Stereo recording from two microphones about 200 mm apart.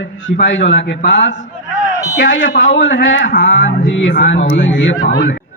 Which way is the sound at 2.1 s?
70° left (ahead or behind).